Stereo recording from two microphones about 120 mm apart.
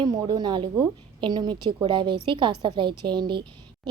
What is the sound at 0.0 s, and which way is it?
A woman's voice, 35° right (ahead or behind).